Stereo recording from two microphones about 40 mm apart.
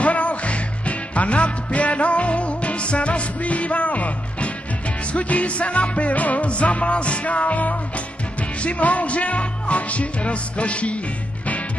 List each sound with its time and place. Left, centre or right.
0.0 s music: left